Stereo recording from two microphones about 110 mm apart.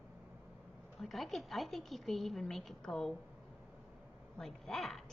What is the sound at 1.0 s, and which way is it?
A woman's voice, centre (ahead or behind).